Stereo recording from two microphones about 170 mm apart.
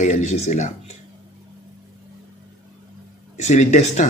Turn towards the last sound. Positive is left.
turn(degrees=45)  # may be behind; listen again after turning